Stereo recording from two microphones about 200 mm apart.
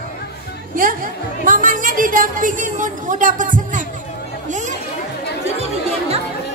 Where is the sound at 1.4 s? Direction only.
40° right (ahead or behind).